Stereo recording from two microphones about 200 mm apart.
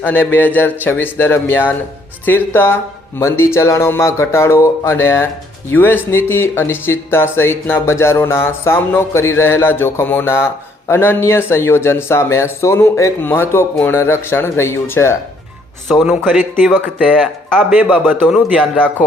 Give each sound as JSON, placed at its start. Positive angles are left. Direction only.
{"t": 0.0, "sound": "speech", "side_deg": 10}
{"t": 15.9, "sound": "speech", "side_deg": 0}